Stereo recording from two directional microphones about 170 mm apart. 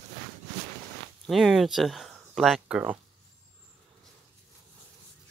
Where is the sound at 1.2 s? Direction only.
Centre (ahead or behind).